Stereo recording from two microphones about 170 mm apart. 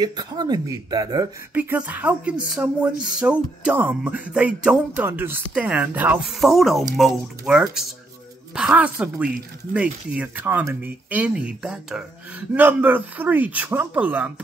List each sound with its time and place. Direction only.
0.0 s speech: 25° right (ahead or behind)
1.5 s speech: 10° right (ahead or behind)